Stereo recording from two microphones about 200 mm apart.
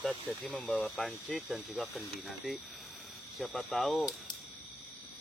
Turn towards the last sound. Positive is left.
turn(degrees=0)  # may be behind; listen again after turning